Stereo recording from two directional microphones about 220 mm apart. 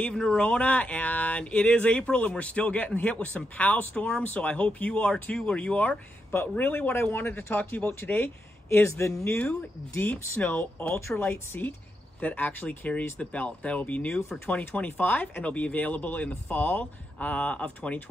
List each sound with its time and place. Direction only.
0.0 s speech: 5° left (ahead or behind)